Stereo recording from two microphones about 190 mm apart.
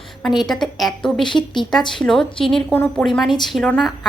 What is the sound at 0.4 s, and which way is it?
A woman's voice, centre (ahead or behind).